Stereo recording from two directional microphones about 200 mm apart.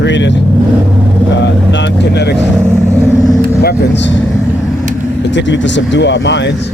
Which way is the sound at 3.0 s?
Centre (ahead or behind).